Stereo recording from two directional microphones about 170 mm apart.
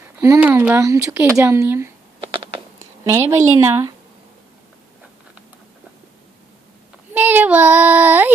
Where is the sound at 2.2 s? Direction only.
30° right (ahead or behind).